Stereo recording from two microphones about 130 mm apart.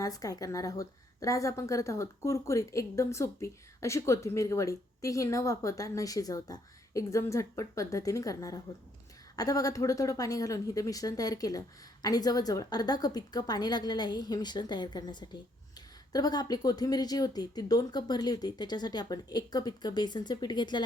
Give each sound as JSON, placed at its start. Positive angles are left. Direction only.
{"t": 0.0, "sound": "a woman's voice", "side_deg": 25}